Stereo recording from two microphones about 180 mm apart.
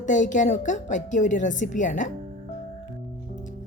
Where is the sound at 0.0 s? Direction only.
45° left (ahead or behind).